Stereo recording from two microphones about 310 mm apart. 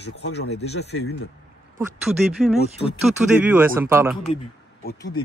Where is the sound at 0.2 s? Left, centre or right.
Left.